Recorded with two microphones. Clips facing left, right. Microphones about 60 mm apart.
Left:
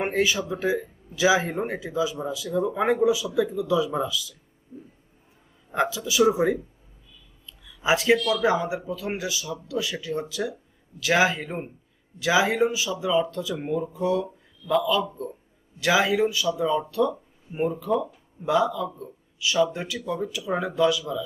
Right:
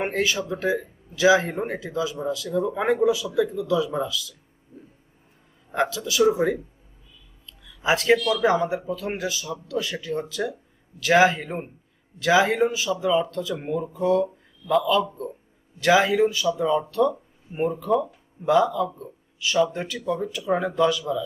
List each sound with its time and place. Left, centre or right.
0.1 s speech: centre
2.6 s speech: centre
5.7 s speech: centre
7.6 s a sound: centre
8.3 s speech: centre
12.2 s speech: centre
13.9 s speech: centre
15.8 s speech: centre
17.1 s a sound: centre
17.7 s speech: centre